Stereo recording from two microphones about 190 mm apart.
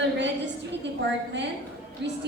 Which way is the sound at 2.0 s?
65° right (ahead or behind).